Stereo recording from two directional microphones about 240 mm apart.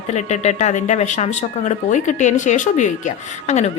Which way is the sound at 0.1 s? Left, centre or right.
Left.